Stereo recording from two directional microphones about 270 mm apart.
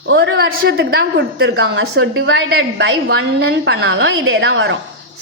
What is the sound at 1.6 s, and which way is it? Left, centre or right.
A woman's voice, right.